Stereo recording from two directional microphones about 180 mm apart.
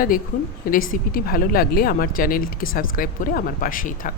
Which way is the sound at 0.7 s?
50° left (ahead or behind).